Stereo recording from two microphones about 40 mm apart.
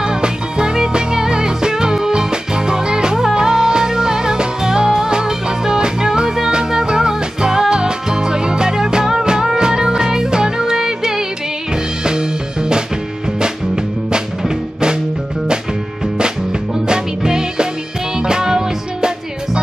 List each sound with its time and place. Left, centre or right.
0.0 s music: right
16.8 s music: centre